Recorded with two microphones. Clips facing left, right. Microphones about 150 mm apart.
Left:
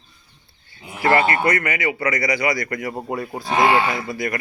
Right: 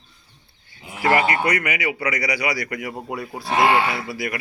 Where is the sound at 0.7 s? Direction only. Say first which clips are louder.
Left 1 dB; 10° right (ahead or behind).